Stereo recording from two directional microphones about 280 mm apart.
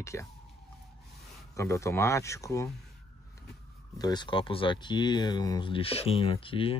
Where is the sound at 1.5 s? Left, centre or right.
Centre.